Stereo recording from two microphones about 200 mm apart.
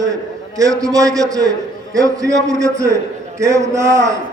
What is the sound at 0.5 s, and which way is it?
A man's voice, 15° right (ahead or behind).